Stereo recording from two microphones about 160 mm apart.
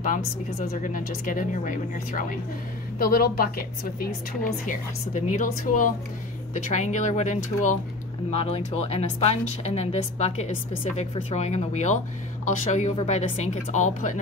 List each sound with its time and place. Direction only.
0.0 s a woman's voice: 55° left (ahead or behind)
3.0 s a woman's voice: 65° left (ahead or behind); by 7.7 s 50° left (ahead or behind)
8.3 s a woman's voice: 40° left (ahead or behind)